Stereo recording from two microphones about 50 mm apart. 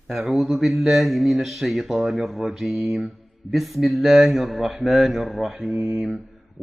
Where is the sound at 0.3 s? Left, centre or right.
Centre.